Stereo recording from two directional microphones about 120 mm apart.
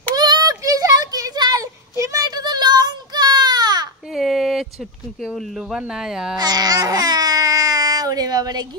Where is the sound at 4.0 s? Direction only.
Centre (ahead or behind).